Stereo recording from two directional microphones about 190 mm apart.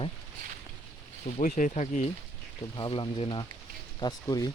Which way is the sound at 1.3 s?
40° left (ahead or behind).